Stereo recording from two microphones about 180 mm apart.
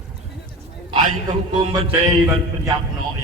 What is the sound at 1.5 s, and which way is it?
Music, 30° right (ahead or behind).